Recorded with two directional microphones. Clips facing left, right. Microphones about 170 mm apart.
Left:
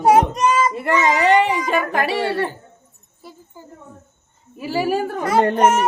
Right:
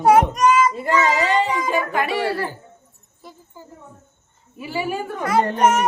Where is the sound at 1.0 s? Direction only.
65° left (ahead or behind).